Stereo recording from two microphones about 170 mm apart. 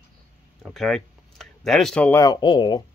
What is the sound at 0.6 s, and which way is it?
Speech, 5° left (ahead or behind).